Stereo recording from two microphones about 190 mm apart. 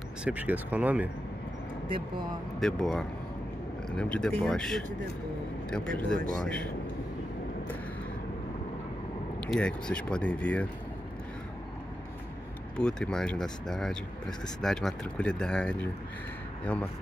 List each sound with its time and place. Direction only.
0.2 s speech: 10° right (ahead or behind)
2.0 s speech: 25° right (ahead or behind)
2.6 s speech: centre (ahead or behind)
9.5 s speech: 5° left (ahead or behind)
12.7 s speech: 5° left (ahead or behind)